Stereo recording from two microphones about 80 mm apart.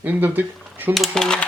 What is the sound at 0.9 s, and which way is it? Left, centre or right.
Speech, centre.